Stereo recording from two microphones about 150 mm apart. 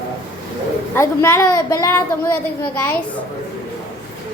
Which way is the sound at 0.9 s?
20° left (ahead or behind).